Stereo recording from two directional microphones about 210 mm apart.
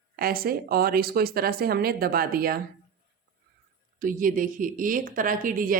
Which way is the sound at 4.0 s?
40° right (ahead or behind).